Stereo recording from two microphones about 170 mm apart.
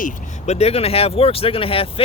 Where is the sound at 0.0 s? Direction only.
40° left (ahead or behind).